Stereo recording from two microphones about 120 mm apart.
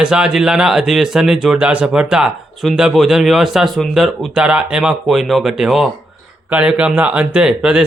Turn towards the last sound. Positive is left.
turn(degrees=-5)  # may be behind; listen again after turning